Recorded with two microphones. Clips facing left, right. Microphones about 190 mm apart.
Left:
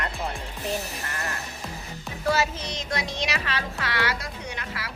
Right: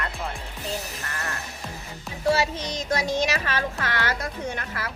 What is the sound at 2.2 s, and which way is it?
Speech, 30° right (ahead or behind).